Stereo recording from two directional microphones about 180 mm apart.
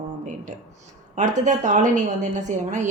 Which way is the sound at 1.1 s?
45° right (ahead or behind).